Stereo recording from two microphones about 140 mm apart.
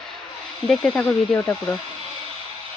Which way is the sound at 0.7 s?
5° left (ahead or behind).